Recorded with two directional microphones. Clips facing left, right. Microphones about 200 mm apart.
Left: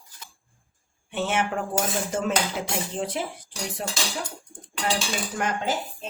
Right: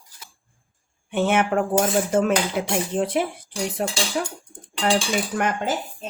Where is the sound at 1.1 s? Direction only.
55° right (ahead or behind).